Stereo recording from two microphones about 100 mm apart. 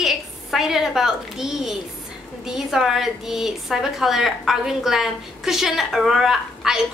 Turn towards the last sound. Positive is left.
turn(degrees=-5)  # may be behind; listen again after turning